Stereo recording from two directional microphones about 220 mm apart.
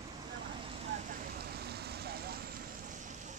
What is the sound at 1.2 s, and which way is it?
Vehicle, 45° right (ahead or behind).